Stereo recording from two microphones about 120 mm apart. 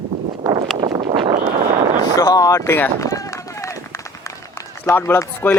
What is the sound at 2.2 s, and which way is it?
Speech, 30° left (ahead or behind).